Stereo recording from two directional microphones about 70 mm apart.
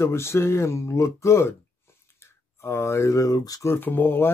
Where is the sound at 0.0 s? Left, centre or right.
Left.